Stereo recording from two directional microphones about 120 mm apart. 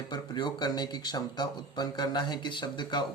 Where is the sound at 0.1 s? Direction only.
35° left (ahead or behind).